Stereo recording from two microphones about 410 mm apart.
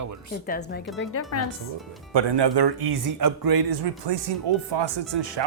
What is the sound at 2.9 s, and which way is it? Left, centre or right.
Speech, right.